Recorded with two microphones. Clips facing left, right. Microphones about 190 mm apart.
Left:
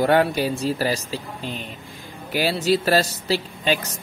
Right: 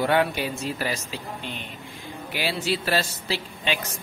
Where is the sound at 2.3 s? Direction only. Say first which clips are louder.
Left 7 dB; 40° left (ahead or behind).